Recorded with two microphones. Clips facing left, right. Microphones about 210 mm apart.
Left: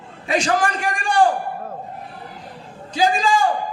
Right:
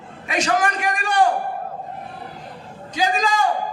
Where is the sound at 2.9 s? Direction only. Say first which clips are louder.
Left 3 dB; 30° left (ahead or behind).